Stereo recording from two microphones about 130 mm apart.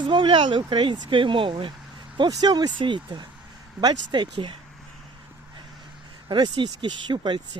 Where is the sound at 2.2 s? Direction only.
30° right (ahead or behind).